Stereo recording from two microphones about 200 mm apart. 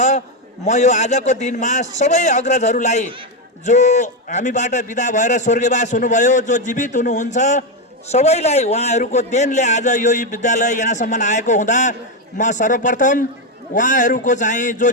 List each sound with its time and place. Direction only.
0.6 s a man's voice: 35° left (ahead or behind)